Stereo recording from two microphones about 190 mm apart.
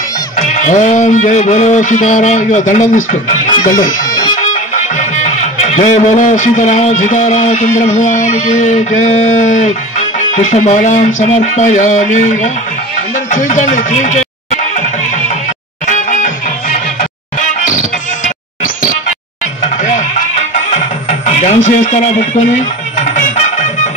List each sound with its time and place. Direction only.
0.4 s music: 40° left (ahead or behind)
9.0 s speech: 35° left (ahead or behind)
11.1 s music: 40° left (ahead or behind)
19.8 s music: 40° left (ahead or behind)